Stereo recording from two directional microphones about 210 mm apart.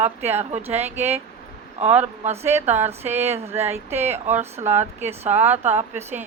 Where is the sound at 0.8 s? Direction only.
30° right (ahead or behind).